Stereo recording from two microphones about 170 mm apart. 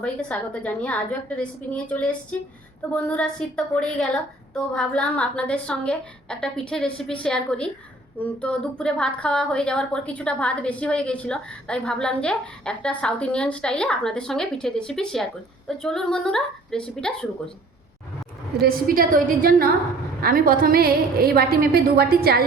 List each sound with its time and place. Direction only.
0.0 s a woman's voice: 5° left (ahead or behind)
18.5 s a woman's voice: 60° right (ahead or behind)